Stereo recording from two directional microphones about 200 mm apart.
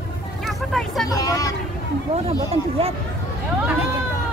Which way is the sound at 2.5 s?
30° right (ahead or behind).